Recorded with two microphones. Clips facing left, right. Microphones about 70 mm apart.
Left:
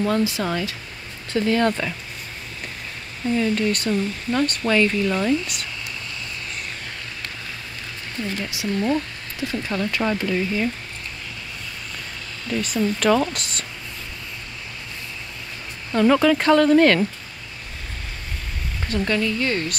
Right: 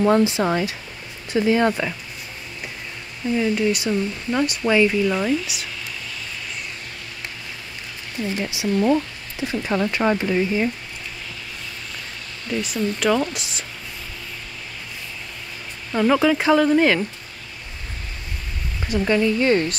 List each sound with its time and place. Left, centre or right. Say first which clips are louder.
0.0 s speech: right 4 dB; right
3.3 s speech: right 2 dB; centre
8.4 s speech: right 5 dB; right
12.4 s speech: left 1 dB; centre
15.9 s speech: left 1 dB; centre
18.9 s speech: right 3 dB; centre